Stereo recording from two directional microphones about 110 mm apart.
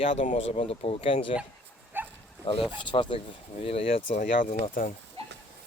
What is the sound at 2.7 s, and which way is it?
Speech, 45° left (ahead or behind).